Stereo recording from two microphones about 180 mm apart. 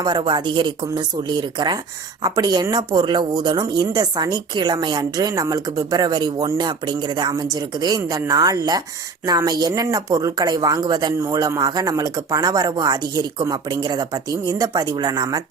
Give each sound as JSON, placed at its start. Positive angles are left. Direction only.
{"t": 0.0, "sound": "speech", "side_deg": -25}